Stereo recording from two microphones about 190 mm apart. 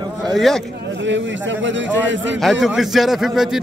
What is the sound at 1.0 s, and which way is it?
A man's voice, 75° right (ahead or behind).